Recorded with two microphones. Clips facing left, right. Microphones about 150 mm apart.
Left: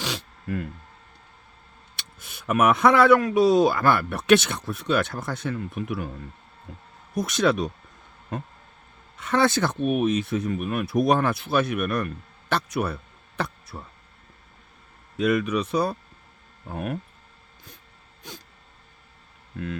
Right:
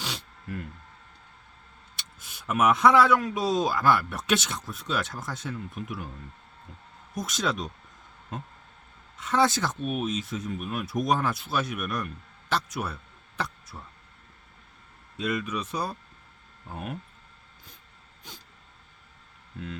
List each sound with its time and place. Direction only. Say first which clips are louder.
0.0 s a sound: left 5 dB; 90° left
2.0 s speech: left 3 dB; 65° left (ahead or behind)
7.1 s speech: left 8 dB; 65° left (ahead or behind)
9.1 s speech: left 3 dB; 60° left (ahead or behind)
15.2 s speech: left 8 dB; 70° left (ahead or behind)
19.5 s speech: left 6 dB; 75° left (ahead or behind)